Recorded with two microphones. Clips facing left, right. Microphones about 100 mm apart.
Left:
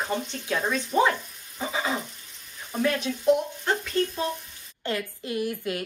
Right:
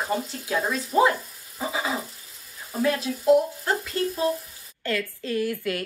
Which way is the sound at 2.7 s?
5° right (ahead or behind).